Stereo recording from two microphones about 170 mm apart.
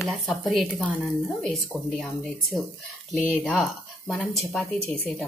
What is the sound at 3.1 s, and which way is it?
Speech, 10° left (ahead or behind).